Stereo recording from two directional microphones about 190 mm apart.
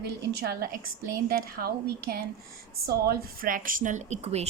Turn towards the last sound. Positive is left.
turn(degrees=-35)  # may be behind; listen again after turning